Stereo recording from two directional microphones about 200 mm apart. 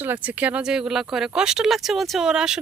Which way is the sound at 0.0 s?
10° right (ahead or behind).